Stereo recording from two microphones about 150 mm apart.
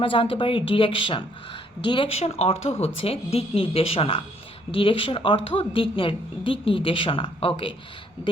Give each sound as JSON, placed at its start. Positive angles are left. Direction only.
{"t": 0.0, "sound": "a woman's voice", "side_deg": 35}